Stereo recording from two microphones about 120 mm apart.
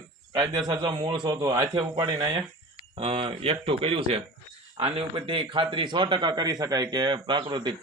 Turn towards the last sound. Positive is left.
turn(degrees=-40)  # may be behind; listen again after turning